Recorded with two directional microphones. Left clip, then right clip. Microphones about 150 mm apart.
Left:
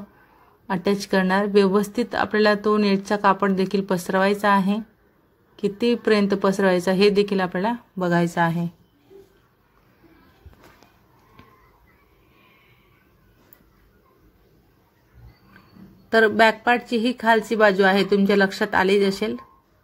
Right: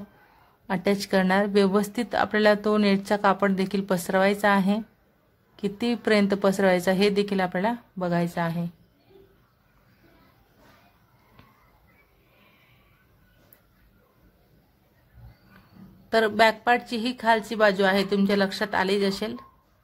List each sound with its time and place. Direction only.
0.7 s speech: centre (ahead or behind)
8.0 s a woman's voice: 20° left (ahead or behind)
16.1 s speech: 10° left (ahead or behind)